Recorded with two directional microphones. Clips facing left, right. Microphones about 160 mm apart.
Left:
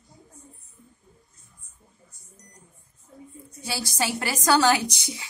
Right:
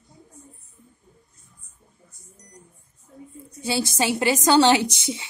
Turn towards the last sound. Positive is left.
turn(degrees=-25)  # may be behind; listen again after turning